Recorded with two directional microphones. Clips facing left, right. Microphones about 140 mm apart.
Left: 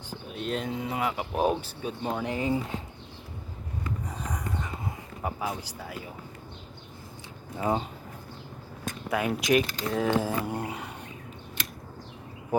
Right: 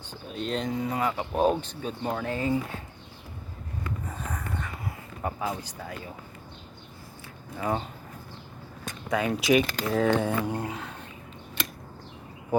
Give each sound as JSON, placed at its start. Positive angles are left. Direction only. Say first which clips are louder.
{"t": 0.1, "sound": "speech", "louder": "right 1 dB", "side_deg": 5}
{"t": 4.3, "sound": "dog", "louder": "left 1 dB", "side_deg": 15}
{"t": 5.2, "sound": "speech", "louder": "right 1 dB", "side_deg": 10}
{"t": 7.5, "sound": "speech", "louder": "left 1 dB", "side_deg": 20}
{"t": 9.0, "sound": "speech", "louder": "right 2 dB", "side_deg": 5}